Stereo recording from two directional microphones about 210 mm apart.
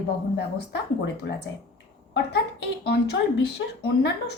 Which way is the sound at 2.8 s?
55° left (ahead or behind).